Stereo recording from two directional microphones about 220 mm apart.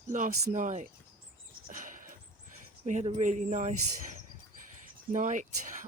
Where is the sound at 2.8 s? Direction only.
35° right (ahead or behind).